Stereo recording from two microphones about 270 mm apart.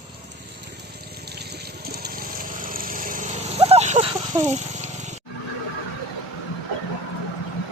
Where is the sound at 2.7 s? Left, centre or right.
Right.